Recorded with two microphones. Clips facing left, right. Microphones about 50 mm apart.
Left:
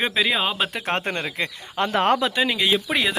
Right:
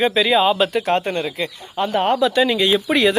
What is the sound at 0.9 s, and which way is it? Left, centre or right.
Speech, left.